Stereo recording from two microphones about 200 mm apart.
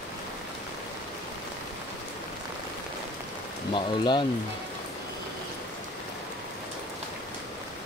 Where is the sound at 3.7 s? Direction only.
25° left (ahead or behind).